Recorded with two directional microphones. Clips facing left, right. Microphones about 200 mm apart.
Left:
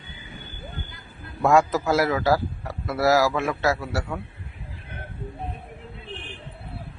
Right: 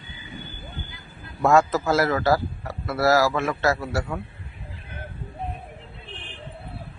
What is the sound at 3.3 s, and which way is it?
Speech, 5° left (ahead or behind).